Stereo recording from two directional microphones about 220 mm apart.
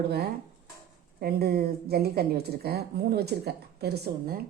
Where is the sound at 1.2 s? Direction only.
45° right (ahead or behind).